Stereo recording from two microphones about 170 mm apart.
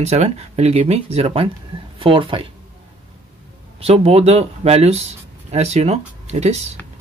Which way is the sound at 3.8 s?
35° right (ahead or behind).